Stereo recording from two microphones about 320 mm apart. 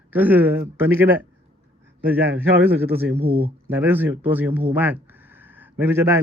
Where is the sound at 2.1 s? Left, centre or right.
Right.